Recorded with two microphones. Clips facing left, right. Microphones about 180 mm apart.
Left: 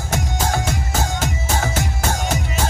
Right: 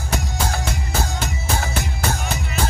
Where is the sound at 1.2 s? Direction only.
45° left (ahead or behind).